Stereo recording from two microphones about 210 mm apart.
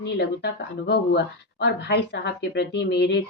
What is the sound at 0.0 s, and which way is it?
Speech, 50° left (ahead or behind).